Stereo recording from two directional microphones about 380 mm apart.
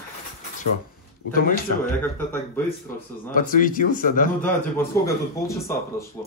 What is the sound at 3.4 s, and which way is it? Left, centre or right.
Speech, left.